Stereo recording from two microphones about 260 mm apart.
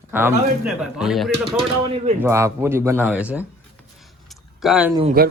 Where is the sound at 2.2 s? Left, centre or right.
Centre.